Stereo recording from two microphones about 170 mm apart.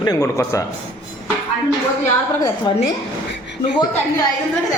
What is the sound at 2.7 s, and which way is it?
Speech, 25° left (ahead or behind).